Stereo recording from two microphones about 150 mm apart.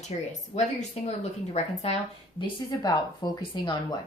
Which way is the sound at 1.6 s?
45° left (ahead or behind).